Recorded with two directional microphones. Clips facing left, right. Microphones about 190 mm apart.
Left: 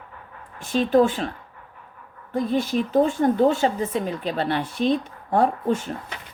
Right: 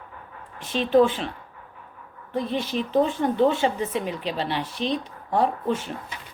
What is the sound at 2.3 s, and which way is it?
Speech, 45° left (ahead or behind).